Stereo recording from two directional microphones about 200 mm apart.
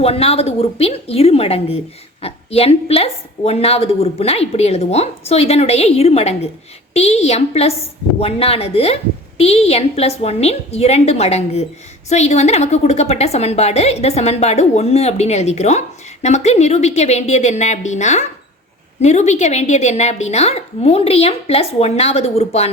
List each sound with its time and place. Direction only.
0.0 s a woman's voice: 30° left (ahead or behind)